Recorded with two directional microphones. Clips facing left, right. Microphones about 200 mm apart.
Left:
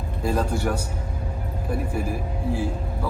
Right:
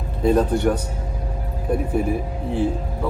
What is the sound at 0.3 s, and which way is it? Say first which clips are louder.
Speech: right 7 dB; 5° left (ahead or behind).